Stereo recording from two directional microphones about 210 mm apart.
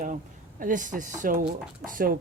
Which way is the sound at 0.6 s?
40° right (ahead or behind).